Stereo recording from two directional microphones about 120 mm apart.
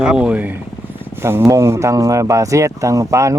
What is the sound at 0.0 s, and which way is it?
Speech, 5° right (ahead or behind).